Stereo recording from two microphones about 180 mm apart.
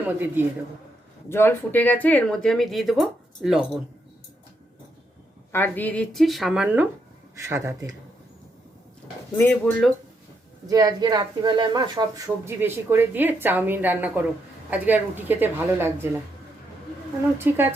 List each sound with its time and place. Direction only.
0.1 s a woman's voice: 10° right (ahead or behind)
1.3 s speech: 10° left (ahead or behind)
5.5 s a woman's voice: 10° left (ahead or behind); by 7.9 s 15° right (ahead or behind)
9.4 s speech: 10° left (ahead or behind)
10.7 s a woman's voice: 20° right (ahead or behind)
17.3 s a woman's voice: 10° right (ahead or behind)